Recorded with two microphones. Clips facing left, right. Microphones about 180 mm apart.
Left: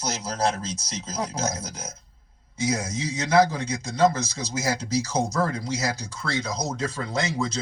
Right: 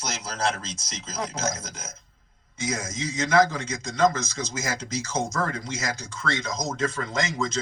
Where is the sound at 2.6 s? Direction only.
35° left (ahead or behind).